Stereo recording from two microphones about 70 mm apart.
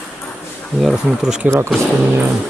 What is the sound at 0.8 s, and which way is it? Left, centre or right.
Speech, centre.